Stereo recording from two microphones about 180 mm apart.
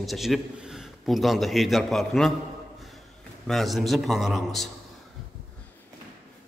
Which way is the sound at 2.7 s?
Centre (ahead or behind).